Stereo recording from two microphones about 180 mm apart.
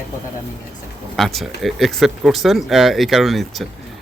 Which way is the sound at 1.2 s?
Centre (ahead or behind).